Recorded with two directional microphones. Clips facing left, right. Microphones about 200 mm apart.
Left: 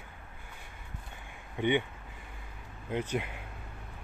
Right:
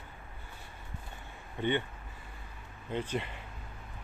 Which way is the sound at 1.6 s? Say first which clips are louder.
Left 3 dB; 15° left (ahead or behind).